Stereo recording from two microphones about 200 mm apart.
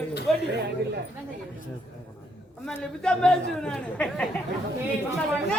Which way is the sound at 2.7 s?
5° left (ahead or behind).